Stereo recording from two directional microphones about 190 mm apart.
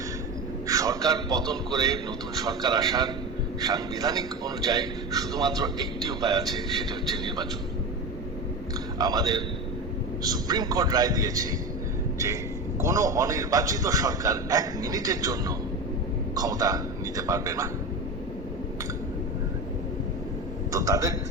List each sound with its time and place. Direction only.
0.7 s a man's voice: 15° right (ahead or behind)
9.0 s a man's voice: 20° right (ahead or behind)
12.8 s a man's voice: 15° right (ahead or behind)
20.7 s a man's voice: 15° right (ahead or behind)